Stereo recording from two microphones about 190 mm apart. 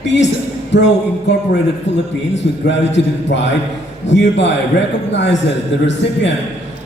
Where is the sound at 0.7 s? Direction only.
65° left (ahead or behind).